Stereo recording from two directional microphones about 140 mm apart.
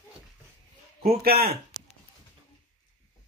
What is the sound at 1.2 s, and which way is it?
Speech, 90° right.